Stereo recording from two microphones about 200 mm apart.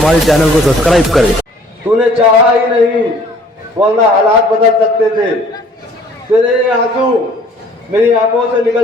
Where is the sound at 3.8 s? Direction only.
20° right (ahead or behind).